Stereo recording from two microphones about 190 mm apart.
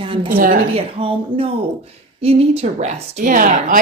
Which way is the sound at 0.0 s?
25° right (ahead or behind).